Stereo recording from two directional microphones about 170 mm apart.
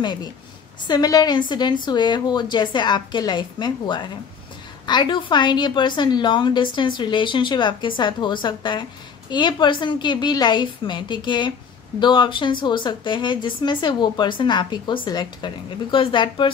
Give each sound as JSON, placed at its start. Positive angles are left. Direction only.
{"t": 0.0, "sound": "a woman's voice", "side_deg": 25}